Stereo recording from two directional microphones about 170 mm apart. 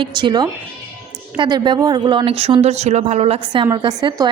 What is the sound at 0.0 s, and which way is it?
A woman's voice, 25° right (ahead or behind).